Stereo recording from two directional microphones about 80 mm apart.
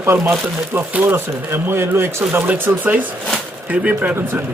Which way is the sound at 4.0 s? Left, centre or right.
Right.